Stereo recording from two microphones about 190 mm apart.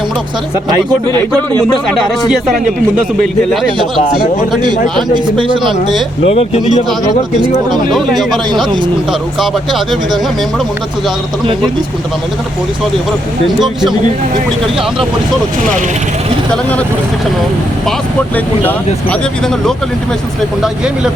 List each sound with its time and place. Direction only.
2.3 s speech: centre (ahead or behind)
5.1 s speech: 25° right (ahead or behind)
6.2 s speech: 35° left (ahead or behind)
7.9 s speech: centre (ahead or behind)
20.6 s speech: 5° right (ahead or behind)